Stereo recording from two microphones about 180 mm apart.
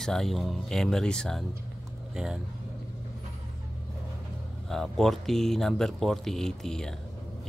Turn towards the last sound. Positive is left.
turn(degrees=5)  # may be behind; listen again after turning